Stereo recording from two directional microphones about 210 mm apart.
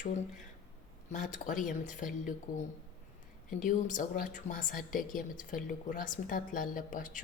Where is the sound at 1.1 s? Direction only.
35° left (ahead or behind).